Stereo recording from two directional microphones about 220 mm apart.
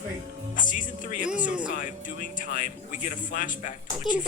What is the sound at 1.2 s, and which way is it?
Speech, 5° right (ahead or behind).